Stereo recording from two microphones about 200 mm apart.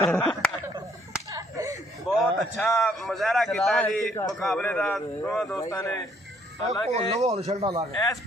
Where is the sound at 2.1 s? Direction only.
5° left (ahead or behind).